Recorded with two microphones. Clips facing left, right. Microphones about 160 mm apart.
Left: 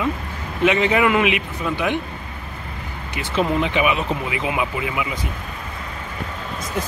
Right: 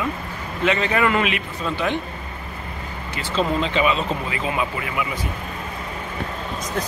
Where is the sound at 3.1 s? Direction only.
15° left (ahead or behind).